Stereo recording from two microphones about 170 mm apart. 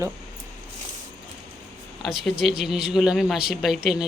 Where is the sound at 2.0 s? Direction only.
Centre (ahead or behind).